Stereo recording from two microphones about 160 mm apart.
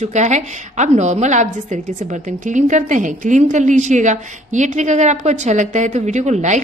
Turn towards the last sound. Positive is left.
turn(degrees=-45)  # may be behind; listen again after turning